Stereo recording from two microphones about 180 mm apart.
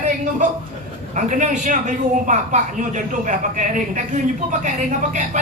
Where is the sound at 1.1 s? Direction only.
45° right (ahead or behind).